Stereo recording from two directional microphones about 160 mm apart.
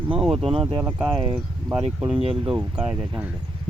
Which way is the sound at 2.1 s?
35° right (ahead or behind).